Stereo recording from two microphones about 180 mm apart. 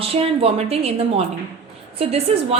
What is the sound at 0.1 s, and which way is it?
A woman's voice, 30° right (ahead or behind).